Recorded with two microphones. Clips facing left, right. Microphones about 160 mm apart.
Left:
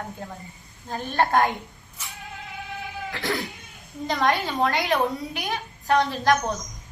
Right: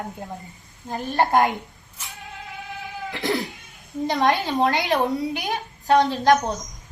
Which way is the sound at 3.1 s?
20° right (ahead or behind).